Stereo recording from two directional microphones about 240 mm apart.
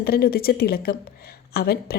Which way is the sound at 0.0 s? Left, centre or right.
Left.